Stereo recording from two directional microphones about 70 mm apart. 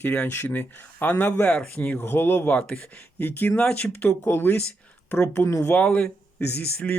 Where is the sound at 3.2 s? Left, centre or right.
Left.